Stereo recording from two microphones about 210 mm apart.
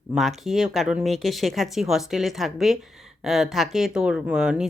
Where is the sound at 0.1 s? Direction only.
Centre (ahead or behind).